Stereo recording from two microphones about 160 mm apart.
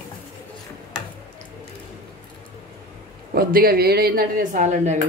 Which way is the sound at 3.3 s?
70° right (ahead or behind).